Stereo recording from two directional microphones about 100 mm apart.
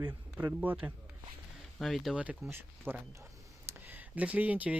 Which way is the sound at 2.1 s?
10° right (ahead or behind).